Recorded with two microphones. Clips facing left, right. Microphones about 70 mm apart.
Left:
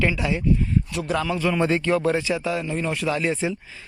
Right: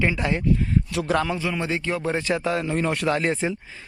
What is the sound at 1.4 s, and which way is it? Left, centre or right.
Speech, centre.